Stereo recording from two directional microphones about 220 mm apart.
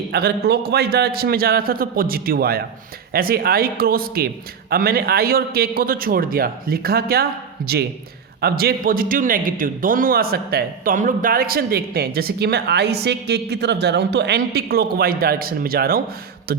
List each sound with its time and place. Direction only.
0.1 s a man's voice: 45° right (ahead or behind)